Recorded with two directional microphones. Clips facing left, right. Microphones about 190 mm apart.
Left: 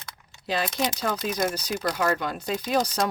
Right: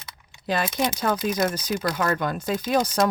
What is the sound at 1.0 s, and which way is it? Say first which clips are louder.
Speech: right 5 dB; 50° right (ahead or behind).